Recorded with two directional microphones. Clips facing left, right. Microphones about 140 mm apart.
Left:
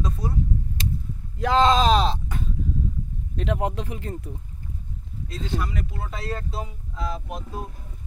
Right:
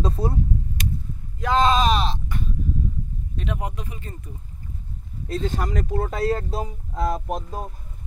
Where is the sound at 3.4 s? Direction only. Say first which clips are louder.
Left 5 dB; 90° left; by 4.3 s 75° left (ahead or behind).